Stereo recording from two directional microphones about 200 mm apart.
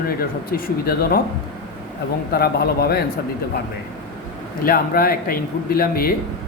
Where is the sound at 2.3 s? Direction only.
50° left (ahead or behind).